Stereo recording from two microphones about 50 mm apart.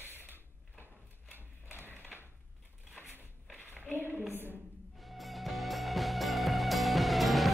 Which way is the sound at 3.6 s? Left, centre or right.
Right.